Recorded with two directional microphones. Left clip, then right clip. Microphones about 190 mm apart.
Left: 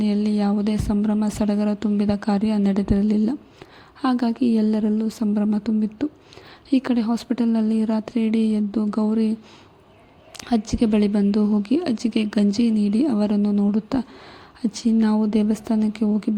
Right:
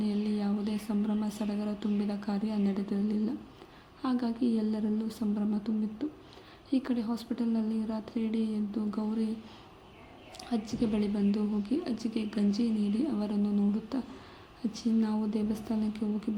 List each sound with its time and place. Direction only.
0.0 s speech: 40° left (ahead or behind)
10.3 s speech: 45° left (ahead or behind)